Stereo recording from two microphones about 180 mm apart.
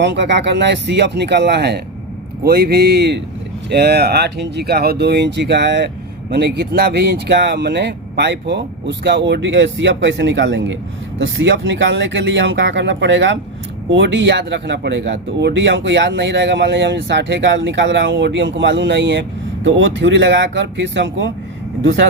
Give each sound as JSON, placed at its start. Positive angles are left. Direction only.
{"t": 0.0, "sound": "speech", "side_deg": -75}
{"t": 19.6, "sound": "speech", "side_deg": -90}